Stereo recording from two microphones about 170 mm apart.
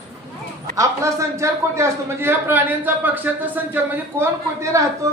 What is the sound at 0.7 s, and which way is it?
A man's voice, 20° right (ahead or behind).